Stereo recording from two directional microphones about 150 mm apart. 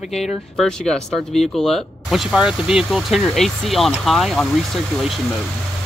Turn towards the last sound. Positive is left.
turn(degrees=0)  # may be behind; listen again after turning